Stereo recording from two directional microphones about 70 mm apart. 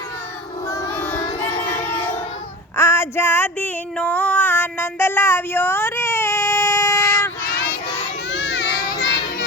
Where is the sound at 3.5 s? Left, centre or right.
Left.